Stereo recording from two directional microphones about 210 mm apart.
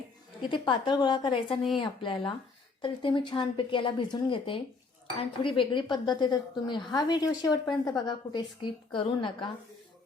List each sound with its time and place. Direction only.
0.4 s a woman's voice: 20° left (ahead or behind)